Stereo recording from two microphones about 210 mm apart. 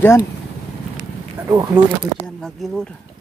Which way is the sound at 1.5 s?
20° right (ahead or behind).